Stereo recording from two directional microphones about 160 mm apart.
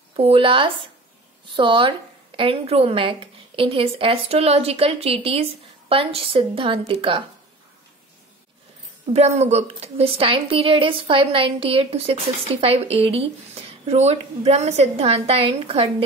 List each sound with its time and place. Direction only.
0.1 s a woman's voice: 35° right (ahead or behind)
9.1 s a woman's voice: 45° right (ahead or behind)